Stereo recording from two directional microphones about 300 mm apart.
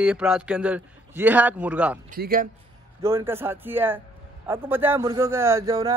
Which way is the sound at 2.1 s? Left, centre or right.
Right.